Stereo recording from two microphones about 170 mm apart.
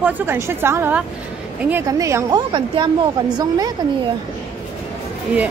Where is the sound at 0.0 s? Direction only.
15° right (ahead or behind).